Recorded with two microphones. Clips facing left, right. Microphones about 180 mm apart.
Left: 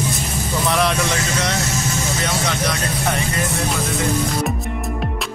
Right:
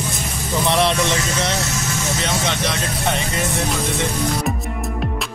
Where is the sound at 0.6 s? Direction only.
25° right (ahead or behind).